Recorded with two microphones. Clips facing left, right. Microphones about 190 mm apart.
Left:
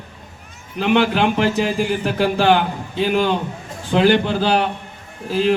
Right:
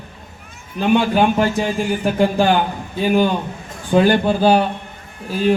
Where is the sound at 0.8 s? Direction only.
85° left.